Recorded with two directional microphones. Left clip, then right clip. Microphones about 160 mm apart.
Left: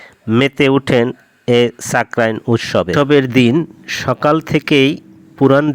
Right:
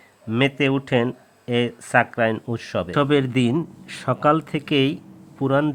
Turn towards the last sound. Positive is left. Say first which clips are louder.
# left 9 dB
turn(degrees=30)  # may be behind; listen again after turning